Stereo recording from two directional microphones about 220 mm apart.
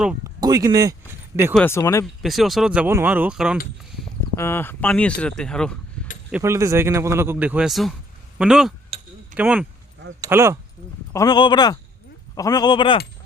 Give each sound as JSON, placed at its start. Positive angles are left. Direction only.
{"t": 0.0, "sound": "speech", "side_deg": -5}
{"t": 0.3, "sound": "speech", "side_deg": -15}
{"t": 1.5, "sound": "speech", "side_deg": 10}
{"t": 2.2, "sound": "speech", "side_deg": 0}
{"t": 4.4, "sound": "speech", "side_deg": 10}
{"t": 6.3, "sound": "a man's voice", "side_deg": -10}
{"t": 11.1, "sound": "a man's voice", "side_deg": 15}